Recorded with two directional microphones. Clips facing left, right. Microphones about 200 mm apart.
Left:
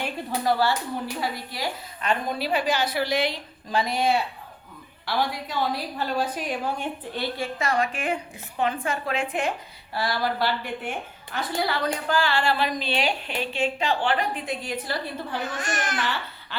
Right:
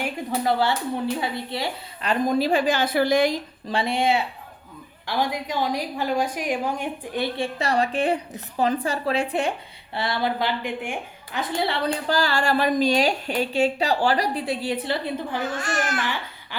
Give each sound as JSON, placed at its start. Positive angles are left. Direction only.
{"t": 1.2, "sound": "a woman's voice", "side_deg": -25}
{"t": 3.7, "sound": "a woman's voice", "side_deg": -30}
{"t": 7.3, "sound": "a woman's voice", "side_deg": -30}
{"t": 9.9, "sound": "a woman's voice", "side_deg": -25}
{"t": 15.4, "sound": "a child's voice", "side_deg": 20}
{"t": 16.0, "sound": "speech", "side_deg": -15}